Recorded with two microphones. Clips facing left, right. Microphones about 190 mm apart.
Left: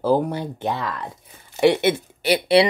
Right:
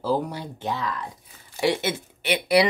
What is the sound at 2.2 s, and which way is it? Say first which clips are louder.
Speech: left 3 dB; 35° left (ahead or behind).